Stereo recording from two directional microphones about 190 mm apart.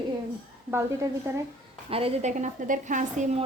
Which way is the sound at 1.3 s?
10° right (ahead or behind).